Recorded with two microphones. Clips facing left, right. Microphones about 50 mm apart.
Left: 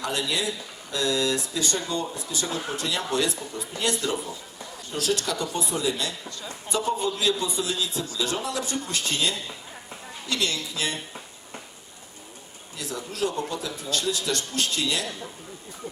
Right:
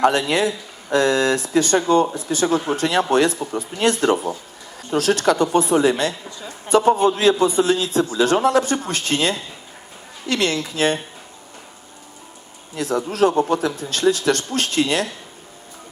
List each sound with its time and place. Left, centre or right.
0.0 s speech: right
12.7 s speech: right